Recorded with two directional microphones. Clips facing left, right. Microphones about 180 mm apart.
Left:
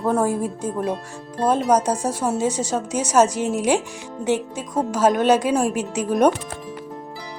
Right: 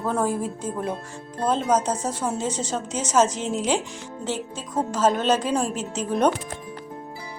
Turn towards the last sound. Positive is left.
turn(degrees=10)  # may be behind; listen again after turning